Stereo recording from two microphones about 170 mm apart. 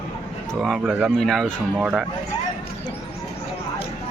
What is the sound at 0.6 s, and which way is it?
Speech, 5° right (ahead or behind).